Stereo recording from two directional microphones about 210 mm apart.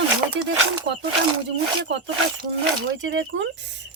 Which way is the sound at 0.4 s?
60° right (ahead or behind).